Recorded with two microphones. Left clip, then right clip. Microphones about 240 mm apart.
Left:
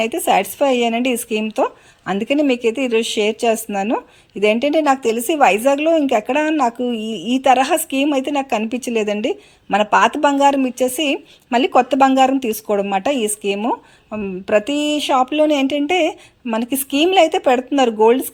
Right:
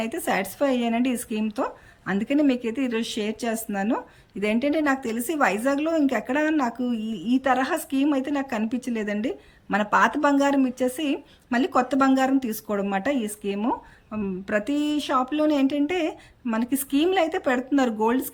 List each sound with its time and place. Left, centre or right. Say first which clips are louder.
0.0 s a woman's voice: left 10 dB; centre
7.2 s a woman's voice: left 2 dB; right
7.4 s a woman's voice: left 11 dB; centre